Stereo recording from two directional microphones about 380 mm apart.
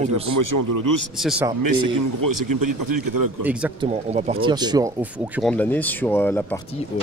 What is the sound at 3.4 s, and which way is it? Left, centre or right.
Speech, centre.